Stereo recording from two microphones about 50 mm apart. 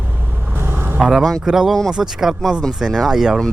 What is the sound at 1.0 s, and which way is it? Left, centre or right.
Mantra, centre.